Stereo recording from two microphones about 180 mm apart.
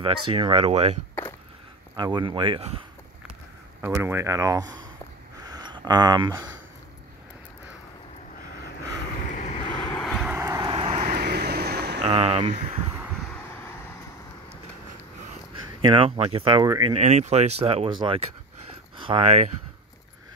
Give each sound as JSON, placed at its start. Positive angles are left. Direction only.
{"t": 0.0, "sound": "speech", "side_deg": -30}
{"t": 2.0, "sound": "speech", "side_deg": -25}
{"t": 3.8, "sound": "speech", "side_deg": -15}
{"t": 5.4, "sound": "a sound", "side_deg": -25}
{"t": 9.3, "sound": "vehicle", "side_deg": 40}
{"t": 9.7, "sound": "vehicle", "side_deg": 25}
{"t": 9.9, "sound": "vehicle", "side_deg": 0}
{"t": 10.3, "sound": "vehicle", "side_deg": -15}
{"t": 11.1, "sound": "vehicle", "side_deg": -65}
{"t": 12.0, "sound": "speech", "side_deg": -35}
{"t": 15.8, "sound": "speech", "side_deg": -30}
{"t": 17.0, "sound": "speech", "side_deg": -40}